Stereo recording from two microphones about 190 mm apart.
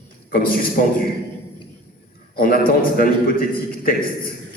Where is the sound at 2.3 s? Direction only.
50° left (ahead or behind).